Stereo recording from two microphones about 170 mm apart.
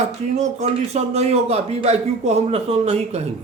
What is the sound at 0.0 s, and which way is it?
Speech, 40° right (ahead or behind).